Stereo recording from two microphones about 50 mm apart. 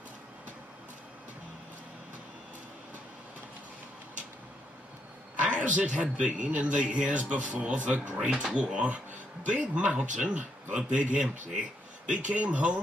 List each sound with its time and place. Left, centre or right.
5.4 s a man's voice: right